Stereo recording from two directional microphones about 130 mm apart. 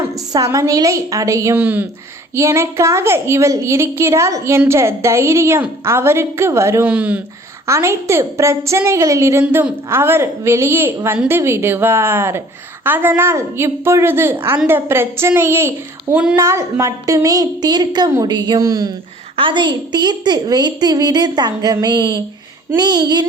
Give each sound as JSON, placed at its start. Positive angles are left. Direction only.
{"t": 0.1, "sound": "a woman's voice", "side_deg": -25}